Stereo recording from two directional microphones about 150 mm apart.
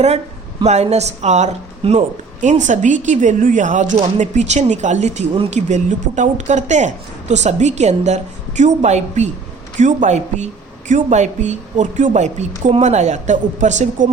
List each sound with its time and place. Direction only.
0.6 s a woman's voice: 50° right (ahead or behind)